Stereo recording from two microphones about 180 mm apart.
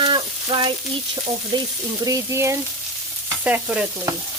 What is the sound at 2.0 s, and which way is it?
Speech, 20° right (ahead or behind).